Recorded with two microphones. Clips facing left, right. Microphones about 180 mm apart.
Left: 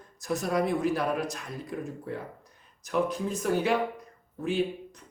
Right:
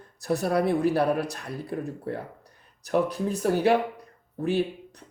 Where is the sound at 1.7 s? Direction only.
45° right (ahead or behind).